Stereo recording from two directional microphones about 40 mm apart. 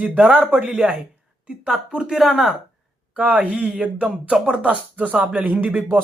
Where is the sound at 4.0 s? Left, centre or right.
Right.